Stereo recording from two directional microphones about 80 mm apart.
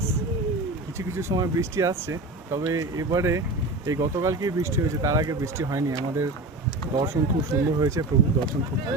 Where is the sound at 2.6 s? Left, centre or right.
Right.